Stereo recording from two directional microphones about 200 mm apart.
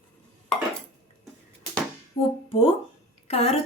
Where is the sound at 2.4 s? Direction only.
30° left (ahead or behind).